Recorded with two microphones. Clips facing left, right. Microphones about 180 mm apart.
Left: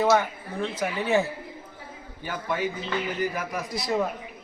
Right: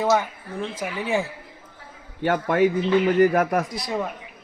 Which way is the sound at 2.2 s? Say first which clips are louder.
Right 9 dB; 65° right (ahead or behind).